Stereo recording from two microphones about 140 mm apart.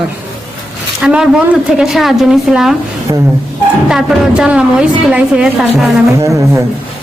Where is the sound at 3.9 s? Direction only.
5° right (ahead or behind).